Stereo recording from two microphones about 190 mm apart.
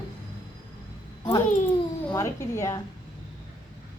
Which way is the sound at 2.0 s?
15° left (ahead or behind).